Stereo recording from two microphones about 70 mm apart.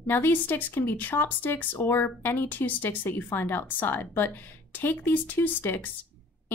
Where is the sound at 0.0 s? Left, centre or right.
Left.